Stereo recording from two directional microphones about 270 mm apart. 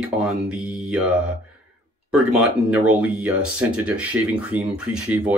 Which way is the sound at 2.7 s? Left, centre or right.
Centre.